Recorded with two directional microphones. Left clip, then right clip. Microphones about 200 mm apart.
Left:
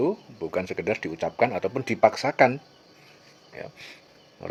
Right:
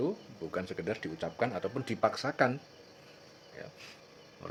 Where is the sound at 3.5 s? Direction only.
35° left (ahead or behind).